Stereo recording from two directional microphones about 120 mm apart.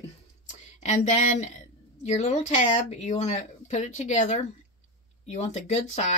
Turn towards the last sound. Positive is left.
turn(degrees=70)  # may be behind; listen again after turning